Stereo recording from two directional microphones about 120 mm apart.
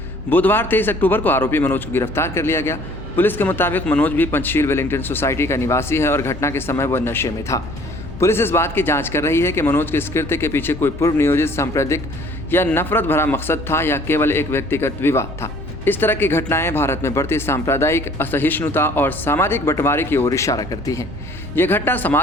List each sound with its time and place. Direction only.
0.3 s a man's voice: 15° left (ahead or behind)
21.5 s a man's voice: 15° left (ahead or behind)